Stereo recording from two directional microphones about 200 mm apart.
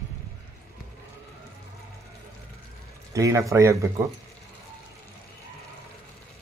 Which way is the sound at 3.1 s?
15° right (ahead or behind).